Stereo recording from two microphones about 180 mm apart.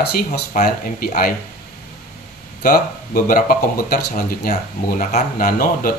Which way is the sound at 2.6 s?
50° left (ahead or behind).